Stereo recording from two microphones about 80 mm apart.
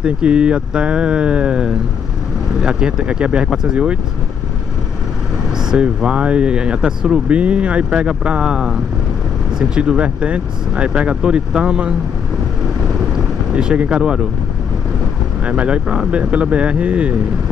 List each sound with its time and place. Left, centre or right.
0.0 s speech: centre
5.7 s speech: centre
13.1 s boat: centre
15.4 s speech: centre